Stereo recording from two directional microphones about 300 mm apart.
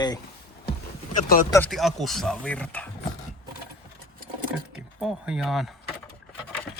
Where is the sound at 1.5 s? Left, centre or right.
Centre.